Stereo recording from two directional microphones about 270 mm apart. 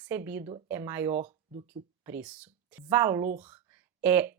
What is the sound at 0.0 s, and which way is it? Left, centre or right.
Speech, centre.